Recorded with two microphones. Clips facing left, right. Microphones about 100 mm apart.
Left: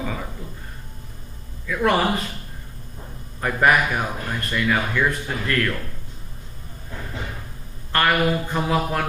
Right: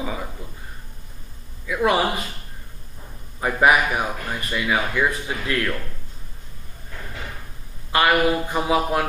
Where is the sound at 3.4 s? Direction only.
5° right (ahead or behind).